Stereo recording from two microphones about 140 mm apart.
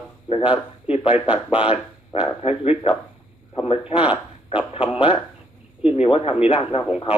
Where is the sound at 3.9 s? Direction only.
10° right (ahead or behind).